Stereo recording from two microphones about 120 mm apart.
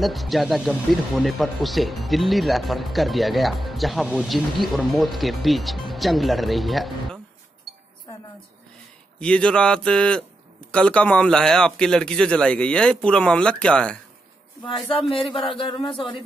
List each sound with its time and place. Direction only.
0.0 s speech: centre (ahead or behind)
9.2 s a man's voice: 10° left (ahead or behind)
14.9 s speech: 50° left (ahead or behind)